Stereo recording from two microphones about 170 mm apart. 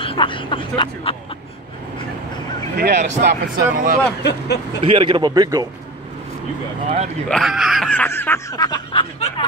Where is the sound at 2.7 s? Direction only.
80° right.